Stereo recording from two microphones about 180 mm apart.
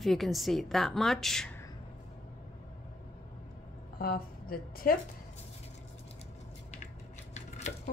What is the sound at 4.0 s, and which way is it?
A woman's voice, 55° left (ahead or behind).